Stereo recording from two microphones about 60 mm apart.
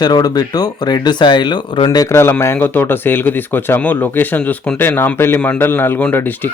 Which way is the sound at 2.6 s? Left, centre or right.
Left.